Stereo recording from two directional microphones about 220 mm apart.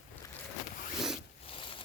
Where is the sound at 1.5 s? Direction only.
25° left (ahead or behind).